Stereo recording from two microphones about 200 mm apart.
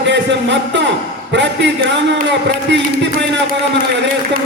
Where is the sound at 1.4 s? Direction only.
60° right (ahead or behind).